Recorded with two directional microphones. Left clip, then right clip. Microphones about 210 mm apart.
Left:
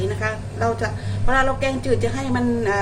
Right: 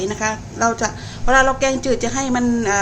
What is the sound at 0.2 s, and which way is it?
A woman's voice, 40° right (ahead or behind).